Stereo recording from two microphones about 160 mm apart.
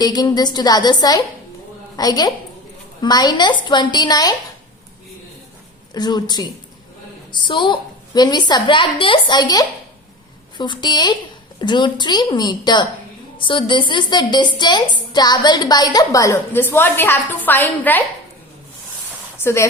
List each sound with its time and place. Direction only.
0.0 s a woman's voice: 25° left (ahead or behind)
5.9 s a woman's voice: 25° left (ahead or behind)
19.4 s speech: 15° left (ahead or behind)